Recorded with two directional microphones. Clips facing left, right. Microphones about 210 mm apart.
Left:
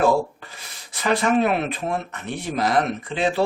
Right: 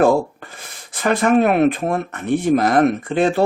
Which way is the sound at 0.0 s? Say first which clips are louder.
Right 4 dB; 50° right (ahead or behind).